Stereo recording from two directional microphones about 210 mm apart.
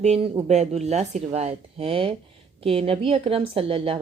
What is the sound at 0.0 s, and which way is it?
A woman's voice, 30° right (ahead or behind).